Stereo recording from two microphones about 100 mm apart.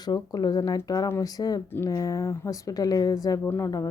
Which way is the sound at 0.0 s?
45° left (ahead or behind).